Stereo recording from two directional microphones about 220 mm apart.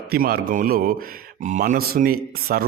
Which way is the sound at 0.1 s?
45° right (ahead or behind).